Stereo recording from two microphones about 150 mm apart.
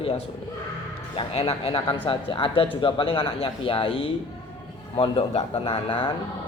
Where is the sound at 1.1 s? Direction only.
45° left (ahead or behind).